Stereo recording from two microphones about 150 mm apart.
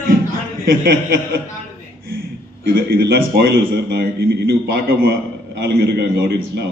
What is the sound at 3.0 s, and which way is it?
A man's voice, 90° right.